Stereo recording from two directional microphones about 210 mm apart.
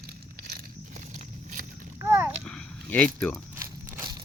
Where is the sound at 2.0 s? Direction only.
15° right (ahead or behind).